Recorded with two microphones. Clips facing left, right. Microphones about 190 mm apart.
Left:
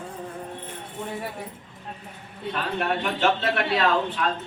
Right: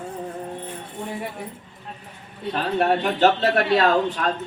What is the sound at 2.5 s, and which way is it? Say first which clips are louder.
Speech: right 6 dB; 35° right (ahead or behind).